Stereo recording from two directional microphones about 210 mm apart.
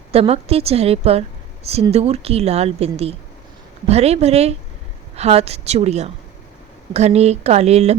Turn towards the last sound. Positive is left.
turn(degrees=-30)  # may be behind; listen again after turning